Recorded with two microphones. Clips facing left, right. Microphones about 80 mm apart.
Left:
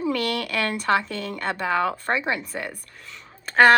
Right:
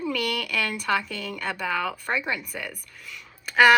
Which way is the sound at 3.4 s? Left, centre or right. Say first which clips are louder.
Left 2 dB; left.